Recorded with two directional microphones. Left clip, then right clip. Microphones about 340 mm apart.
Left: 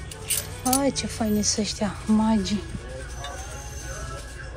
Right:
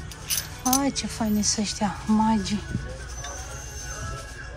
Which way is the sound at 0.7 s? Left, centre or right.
Centre.